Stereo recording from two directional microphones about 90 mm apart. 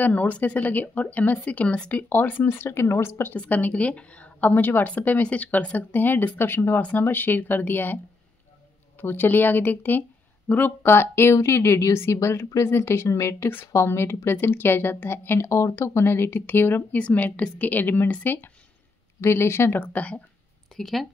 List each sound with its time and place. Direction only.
0.0 s a woman's voice: 20° left (ahead or behind)
9.0 s a woman's voice: 20° left (ahead or behind)
20.7 s speech: centre (ahead or behind)